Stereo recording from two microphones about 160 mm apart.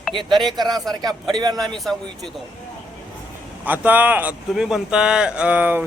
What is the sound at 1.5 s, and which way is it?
Speech, centre (ahead or behind).